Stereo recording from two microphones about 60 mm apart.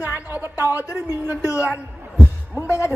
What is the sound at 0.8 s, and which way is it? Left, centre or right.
Speech, left.